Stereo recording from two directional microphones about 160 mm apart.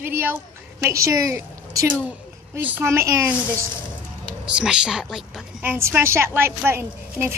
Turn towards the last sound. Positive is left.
turn(degrees=-15)  # may be behind; listen again after turning